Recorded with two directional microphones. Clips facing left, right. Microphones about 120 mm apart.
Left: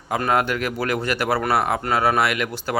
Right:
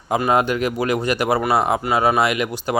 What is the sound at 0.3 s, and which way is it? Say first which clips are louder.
Speech: right 2 dB; 20° right (ahead or behind).